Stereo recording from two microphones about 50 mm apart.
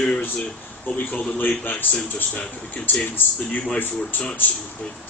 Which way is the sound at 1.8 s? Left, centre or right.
Left.